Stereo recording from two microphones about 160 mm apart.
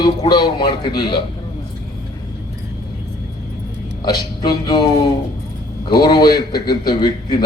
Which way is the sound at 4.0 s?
25° left (ahead or behind).